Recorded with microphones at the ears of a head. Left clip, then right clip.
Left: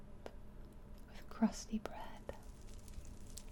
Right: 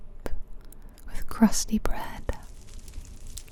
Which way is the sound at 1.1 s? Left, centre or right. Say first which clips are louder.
Right 15 dB; right.